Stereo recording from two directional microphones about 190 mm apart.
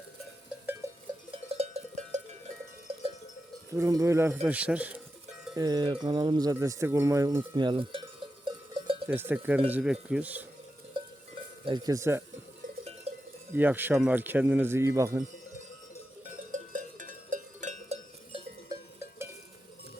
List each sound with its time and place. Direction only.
1.3 s cowbell: 30° right (ahead or behind)
3.7 s speech: 15° right (ahead or behind)
5.5 s speech: 20° right (ahead or behind)
8.4 s cowbell: 25° right (ahead or behind)
9.0 s speech: 10° right (ahead or behind)
11.6 s speech: 20° right (ahead or behind)
13.1 s cowbell: 35° right (ahead or behind)
13.5 s speech: 10° right (ahead or behind)
16.2 s cowbell: 40° right (ahead or behind)